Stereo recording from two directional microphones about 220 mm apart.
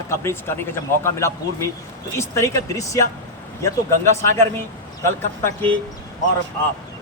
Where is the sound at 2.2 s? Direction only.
15° left (ahead or behind).